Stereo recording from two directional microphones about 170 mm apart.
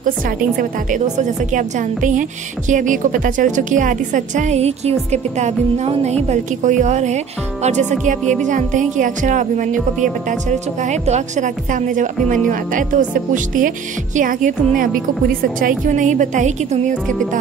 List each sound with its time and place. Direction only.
0.6 s a woman's voice: 45° right (ahead or behind)
10.8 s a woman's voice: 40° right (ahead or behind)